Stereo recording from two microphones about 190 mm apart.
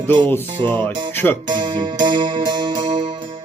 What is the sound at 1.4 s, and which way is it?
Music, 25° right (ahead or behind).